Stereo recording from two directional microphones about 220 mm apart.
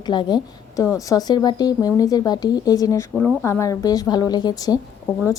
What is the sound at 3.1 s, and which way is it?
Speech, 5° left (ahead or behind).